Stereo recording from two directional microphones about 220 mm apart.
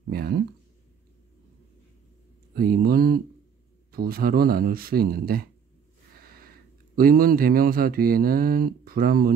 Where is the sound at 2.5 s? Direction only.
45° right (ahead or behind).